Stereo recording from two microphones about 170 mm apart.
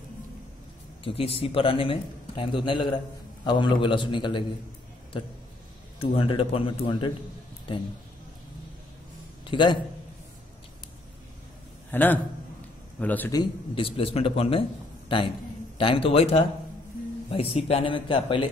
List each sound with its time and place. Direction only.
1.0 s a man's voice: 35° left (ahead or behind)
5.9 s a man's voice: 30° left (ahead or behind)
9.5 s a man's voice: 30° left (ahead or behind)
11.9 s a man's voice: 10° left (ahead or behind)
13.3 s a man's voice: 30° left (ahead or behind)